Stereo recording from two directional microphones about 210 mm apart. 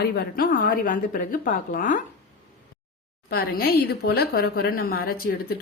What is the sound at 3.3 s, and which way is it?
A woman's voice, 45° left (ahead or behind).